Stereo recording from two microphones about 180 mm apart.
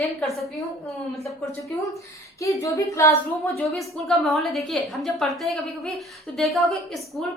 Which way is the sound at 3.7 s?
Centre (ahead or behind).